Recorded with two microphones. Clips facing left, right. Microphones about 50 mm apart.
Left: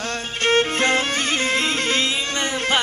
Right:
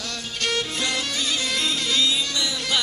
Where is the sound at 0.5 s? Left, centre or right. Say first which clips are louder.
Left 9 dB; left.